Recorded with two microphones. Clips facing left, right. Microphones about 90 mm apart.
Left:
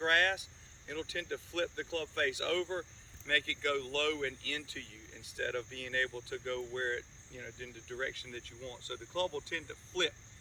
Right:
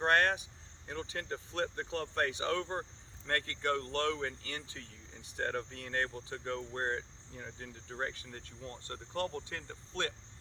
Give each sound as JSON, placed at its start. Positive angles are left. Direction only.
{"t": 0.0, "sound": "speech", "side_deg": -30}